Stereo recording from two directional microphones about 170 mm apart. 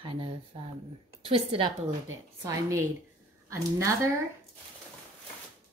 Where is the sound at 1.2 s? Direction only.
35° right (ahead or behind).